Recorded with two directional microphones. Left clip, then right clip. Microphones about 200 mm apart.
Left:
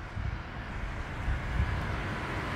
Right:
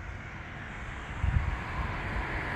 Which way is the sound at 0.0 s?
35° left (ahead or behind).